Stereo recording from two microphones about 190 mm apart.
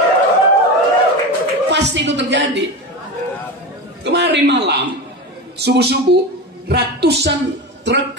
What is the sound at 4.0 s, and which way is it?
A man's voice, 60° right (ahead or behind).